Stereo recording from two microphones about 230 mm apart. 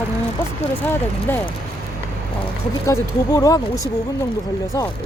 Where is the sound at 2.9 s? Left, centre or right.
Centre.